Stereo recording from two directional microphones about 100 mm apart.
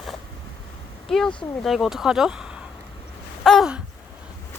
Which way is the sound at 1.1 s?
5° left (ahead or behind).